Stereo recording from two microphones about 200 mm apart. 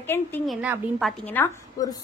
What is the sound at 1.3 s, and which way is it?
Speech, 15° left (ahead or behind).